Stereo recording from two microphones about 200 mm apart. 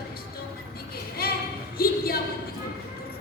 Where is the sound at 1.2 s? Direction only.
50° left (ahead or behind).